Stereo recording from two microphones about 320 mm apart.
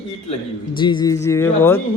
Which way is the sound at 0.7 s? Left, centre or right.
Centre.